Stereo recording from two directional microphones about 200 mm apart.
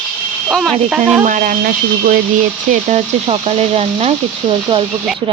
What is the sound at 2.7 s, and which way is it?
Speech, 35° right (ahead or behind).